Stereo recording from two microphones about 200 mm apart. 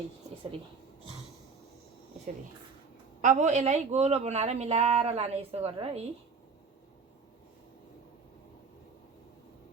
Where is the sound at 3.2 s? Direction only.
35° right (ahead or behind).